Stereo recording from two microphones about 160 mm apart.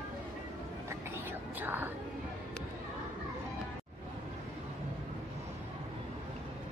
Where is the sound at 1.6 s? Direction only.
10° right (ahead or behind).